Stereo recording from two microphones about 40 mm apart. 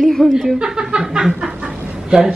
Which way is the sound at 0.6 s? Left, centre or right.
Centre.